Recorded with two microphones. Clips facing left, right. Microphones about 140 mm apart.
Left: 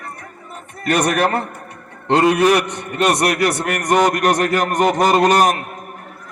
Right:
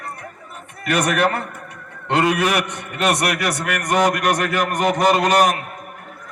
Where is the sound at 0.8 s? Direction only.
35° left (ahead or behind).